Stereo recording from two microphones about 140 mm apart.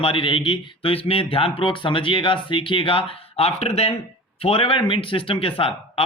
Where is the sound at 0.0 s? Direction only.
40° left (ahead or behind).